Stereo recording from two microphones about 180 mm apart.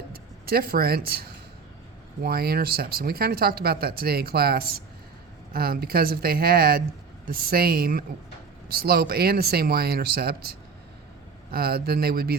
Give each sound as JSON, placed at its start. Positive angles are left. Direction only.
{"t": 0.1, "sound": "speech", "side_deg": -55}
{"t": 11.5, "sound": "speech", "side_deg": -60}